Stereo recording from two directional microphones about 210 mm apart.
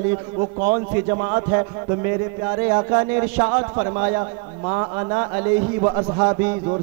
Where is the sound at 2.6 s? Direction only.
20° right (ahead or behind).